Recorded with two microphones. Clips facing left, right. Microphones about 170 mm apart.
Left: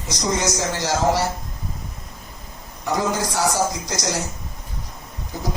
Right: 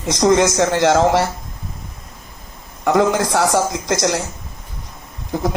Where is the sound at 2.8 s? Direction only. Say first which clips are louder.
Right 7 dB; 60° right (ahead or behind).